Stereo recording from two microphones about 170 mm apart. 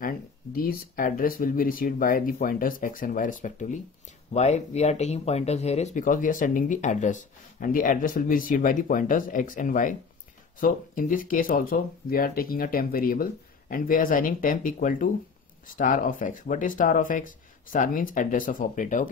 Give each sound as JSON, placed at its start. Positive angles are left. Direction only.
{"t": 0.0, "sound": "speech", "side_deg": 60}